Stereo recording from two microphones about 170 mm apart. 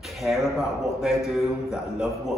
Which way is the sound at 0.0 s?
Centre (ahead or behind).